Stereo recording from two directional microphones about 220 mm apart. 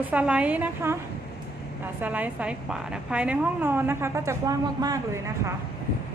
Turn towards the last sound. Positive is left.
turn(degrees=-15)  # may be behind; listen again after turning